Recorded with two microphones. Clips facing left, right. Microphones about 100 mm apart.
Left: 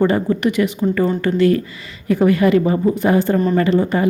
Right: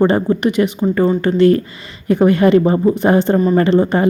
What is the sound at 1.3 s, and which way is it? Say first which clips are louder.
A woman's voice: right 3 dB; 35° right (ahead or behind).